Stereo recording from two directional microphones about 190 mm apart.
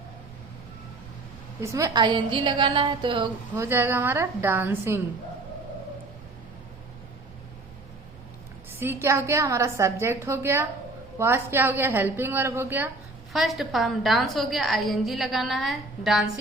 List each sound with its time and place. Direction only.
1.6 s a woman's voice: 15° right (ahead or behind)
3.5 s a woman's voice: 10° right (ahead or behind)
8.8 s a woman's voice: 10° right (ahead or behind)
13.3 s a woman's voice: centre (ahead or behind)